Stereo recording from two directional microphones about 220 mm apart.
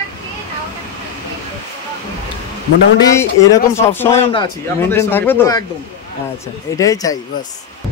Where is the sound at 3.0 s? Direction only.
15° left (ahead or behind).